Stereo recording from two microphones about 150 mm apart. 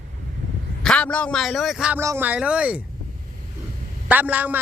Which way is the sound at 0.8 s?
5° left (ahead or behind).